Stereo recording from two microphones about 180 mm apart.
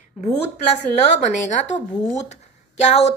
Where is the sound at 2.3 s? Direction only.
40° left (ahead or behind).